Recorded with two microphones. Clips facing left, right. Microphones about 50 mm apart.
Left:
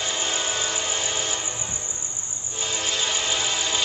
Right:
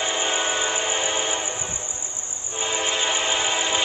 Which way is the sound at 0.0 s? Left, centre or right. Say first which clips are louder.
Right 3 dB; right.